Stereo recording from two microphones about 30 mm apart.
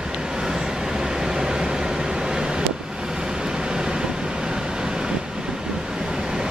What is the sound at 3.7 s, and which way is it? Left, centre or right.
Vehicle, right.